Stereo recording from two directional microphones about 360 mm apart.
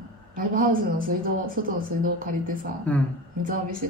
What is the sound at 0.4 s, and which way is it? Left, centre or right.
A woman's voice, right.